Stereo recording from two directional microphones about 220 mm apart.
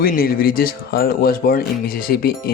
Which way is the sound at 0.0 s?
40° left (ahead or behind).